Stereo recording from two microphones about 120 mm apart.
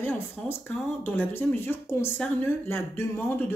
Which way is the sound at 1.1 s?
20° left (ahead or behind).